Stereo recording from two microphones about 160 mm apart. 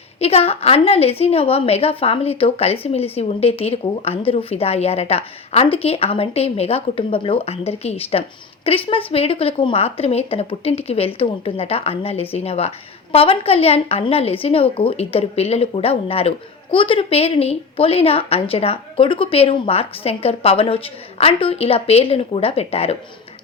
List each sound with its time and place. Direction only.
0.2 s a woman's voice: 40° left (ahead or behind)